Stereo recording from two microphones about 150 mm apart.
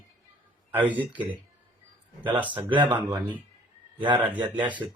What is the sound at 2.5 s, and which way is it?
Speech, 30° right (ahead or behind).